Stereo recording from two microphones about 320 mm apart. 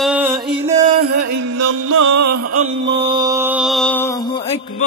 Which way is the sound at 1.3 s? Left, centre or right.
Right.